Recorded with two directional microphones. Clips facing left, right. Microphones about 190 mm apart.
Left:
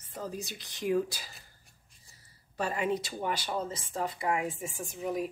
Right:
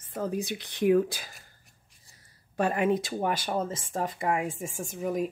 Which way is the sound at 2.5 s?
55° right (ahead or behind).